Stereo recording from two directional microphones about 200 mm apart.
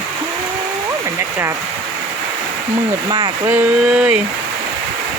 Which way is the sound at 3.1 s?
20° right (ahead or behind).